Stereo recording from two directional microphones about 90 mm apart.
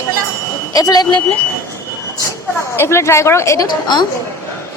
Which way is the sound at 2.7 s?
30° left (ahead or behind).